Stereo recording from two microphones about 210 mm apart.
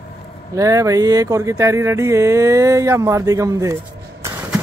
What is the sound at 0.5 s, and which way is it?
Speech, 15° right (ahead or behind).